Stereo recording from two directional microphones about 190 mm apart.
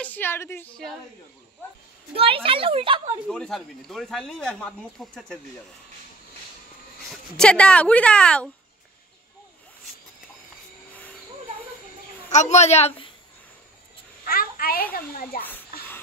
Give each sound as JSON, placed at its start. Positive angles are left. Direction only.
{"t": 0.0, "sound": "a woman's voice", "side_deg": 10}
{"t": 2.1, "sound": "speech", "side_deg": -30}
{"t": 3.3, "sound": "speech", "side_deg": 5}
{"t": 7.1, "sound": "speech", "side_deg": 5}
{"t": 12.3, "sound": "a woman's voice", "side_deg": 35}
{"t": 14.2, "sound": "a child's voice", "side_deg": 50}